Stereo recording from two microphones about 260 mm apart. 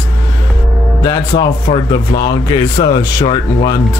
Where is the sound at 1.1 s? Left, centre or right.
Centre.